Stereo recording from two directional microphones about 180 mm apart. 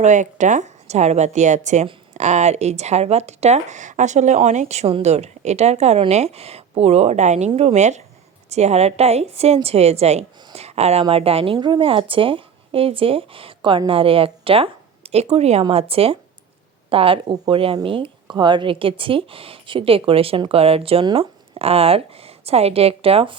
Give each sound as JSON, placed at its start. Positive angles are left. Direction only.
{"t": 0.0, "sound": "speech", "side_deg": -40}